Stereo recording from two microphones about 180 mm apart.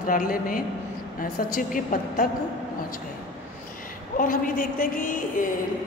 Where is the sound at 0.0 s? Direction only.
50° left (ahead or behind).